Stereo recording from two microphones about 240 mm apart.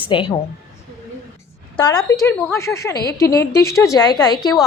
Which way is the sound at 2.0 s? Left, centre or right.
Centre.